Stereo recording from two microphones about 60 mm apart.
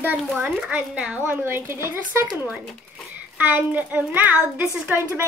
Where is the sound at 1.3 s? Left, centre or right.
Right.